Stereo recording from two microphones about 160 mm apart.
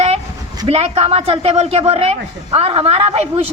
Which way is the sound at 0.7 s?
40° right (ahead or behind).